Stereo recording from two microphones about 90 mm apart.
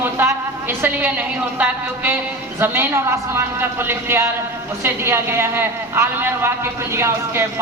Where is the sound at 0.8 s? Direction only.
20° right (ahead or behind).